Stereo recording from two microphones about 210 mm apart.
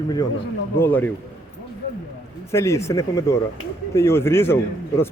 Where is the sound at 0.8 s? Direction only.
10° left (ahead or behind).